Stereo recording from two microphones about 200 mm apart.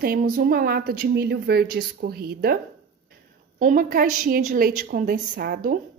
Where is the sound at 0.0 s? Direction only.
45° right (ahead or behind).